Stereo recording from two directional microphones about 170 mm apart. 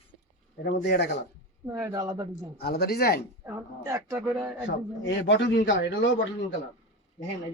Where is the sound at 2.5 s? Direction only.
65° left (ahead or behind).